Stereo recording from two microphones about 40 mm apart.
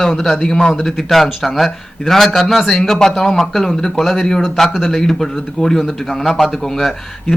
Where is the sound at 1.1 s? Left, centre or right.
Centre.